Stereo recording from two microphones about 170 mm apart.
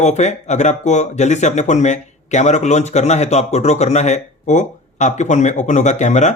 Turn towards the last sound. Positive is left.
turn(degrees=45)  # may be behind; listen again after turning